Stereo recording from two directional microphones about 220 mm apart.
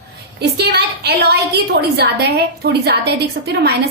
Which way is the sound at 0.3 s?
50° right (ahead or behind).